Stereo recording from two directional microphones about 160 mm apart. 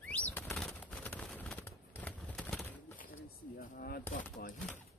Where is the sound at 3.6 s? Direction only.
60° left (ahead or behind).